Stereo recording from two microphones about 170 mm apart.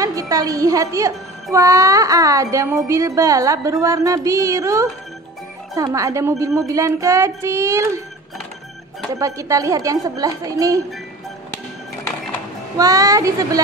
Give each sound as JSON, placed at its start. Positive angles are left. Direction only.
{"t": 0.0, "sound": "speech", "side_deg": -20}
{"t": 5.9, "sound": "speech", "side_deg": -20}
{"t": 9.1, "sound": "speech", "side_deg": -20}
{"t": 12.7, "sound": "speech", "side_deg": -20}